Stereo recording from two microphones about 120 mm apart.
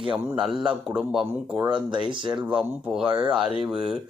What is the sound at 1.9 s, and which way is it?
Speech, 40° right (ahead or behind).